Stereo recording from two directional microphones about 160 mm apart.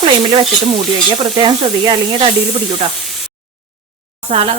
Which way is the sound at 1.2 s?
30° right (ahead or behind).